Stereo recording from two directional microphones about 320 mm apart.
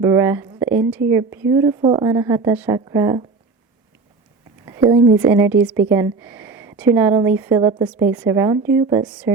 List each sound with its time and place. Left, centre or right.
0.0 s a woman's voice: centre
4.6 s a woman's voice: centre